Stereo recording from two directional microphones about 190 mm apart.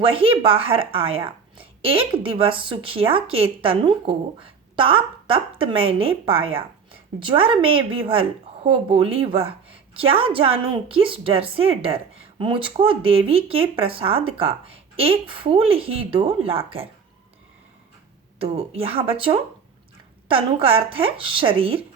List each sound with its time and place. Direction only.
0.0 s a woman's voice: 30° right (ahead or behind)
18.3 s a woman's voice: 30° right (ahead or behind)